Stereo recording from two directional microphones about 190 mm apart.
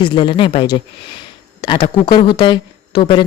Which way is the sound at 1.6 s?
20° left (ahead or behind).